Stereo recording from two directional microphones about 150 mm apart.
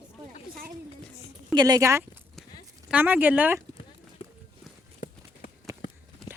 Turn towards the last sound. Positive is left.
turn(degrees=5)  # may be behind; listen again after turning